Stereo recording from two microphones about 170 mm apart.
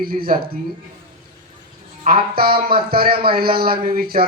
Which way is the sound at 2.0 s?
60° right (ahead or behind).